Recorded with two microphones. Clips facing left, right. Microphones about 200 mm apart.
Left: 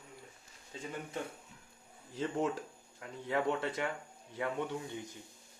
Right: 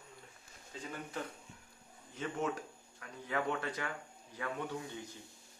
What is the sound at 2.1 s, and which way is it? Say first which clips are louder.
Speech: left 3 dB; 30° left (ahead or behind).